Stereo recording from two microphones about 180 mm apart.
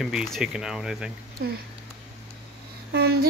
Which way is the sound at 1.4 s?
55° right (ahead or behind).